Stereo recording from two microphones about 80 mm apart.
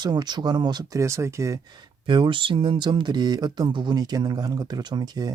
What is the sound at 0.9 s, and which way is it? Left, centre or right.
Speech, right.